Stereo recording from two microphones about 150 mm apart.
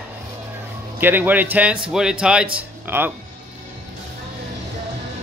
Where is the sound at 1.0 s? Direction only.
10° right (ahead or behind).